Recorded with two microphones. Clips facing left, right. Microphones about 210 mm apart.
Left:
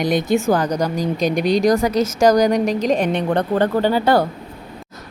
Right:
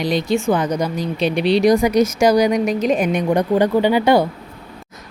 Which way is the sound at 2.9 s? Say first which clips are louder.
Right 1 dB; 10° right (ahead or behind).